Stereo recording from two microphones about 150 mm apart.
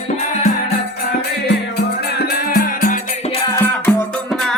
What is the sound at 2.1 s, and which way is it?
Music, 90° left.